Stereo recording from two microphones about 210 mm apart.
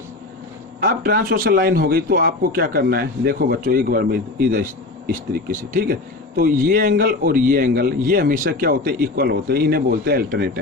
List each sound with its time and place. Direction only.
0.8 s a man's voice: 45° right (ahead or behind)